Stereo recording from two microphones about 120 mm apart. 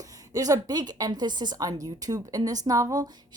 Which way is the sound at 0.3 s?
30° right (ahead or behind).